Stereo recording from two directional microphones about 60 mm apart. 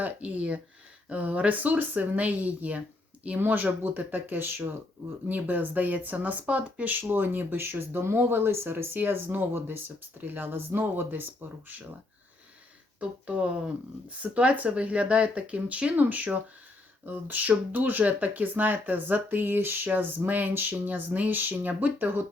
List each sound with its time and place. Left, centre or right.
0.0 s speech: right
13.0 s speech: right